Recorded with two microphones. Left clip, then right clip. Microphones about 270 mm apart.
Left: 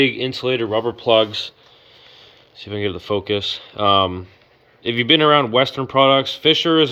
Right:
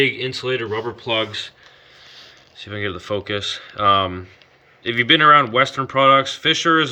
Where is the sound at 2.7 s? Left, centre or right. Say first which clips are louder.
Left 2 dB; centre.